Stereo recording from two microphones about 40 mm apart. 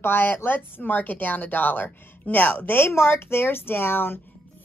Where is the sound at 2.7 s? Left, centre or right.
Left.